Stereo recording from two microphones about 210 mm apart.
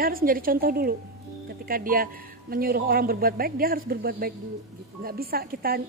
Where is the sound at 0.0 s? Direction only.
45° right (ahead or behind).